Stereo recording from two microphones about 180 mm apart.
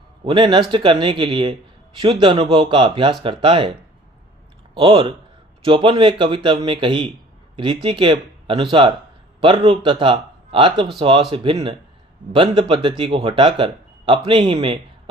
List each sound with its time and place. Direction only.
0.3 s speech: 25° right (ahead or behind)